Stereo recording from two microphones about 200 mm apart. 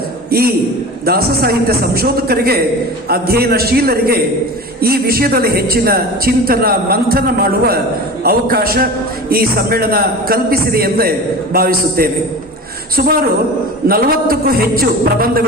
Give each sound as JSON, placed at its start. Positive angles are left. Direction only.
{"t": 0.3, "sound": "a man's voice", "side_deg": -50}
{"t": 13.8, "sound": "a woman's voice", "side_deg": -50}